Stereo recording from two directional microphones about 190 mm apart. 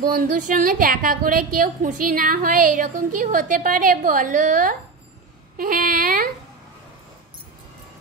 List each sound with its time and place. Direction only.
0.0 s a woman's voice: 50° right (ahead or behind)